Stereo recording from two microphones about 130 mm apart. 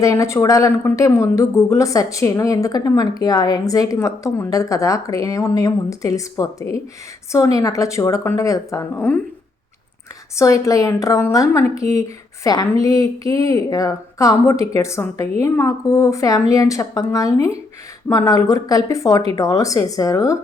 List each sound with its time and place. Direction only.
0.0 s a woman's voice: 25° left (ahead or behind)
9.0 s speech: 15° left (ahead or behind)
10.3 s a woman's voice: 25° left (ahead or behind)